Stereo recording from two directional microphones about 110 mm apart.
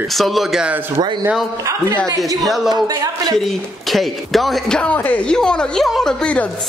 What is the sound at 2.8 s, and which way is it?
Speech, 35° right (ahead or behind).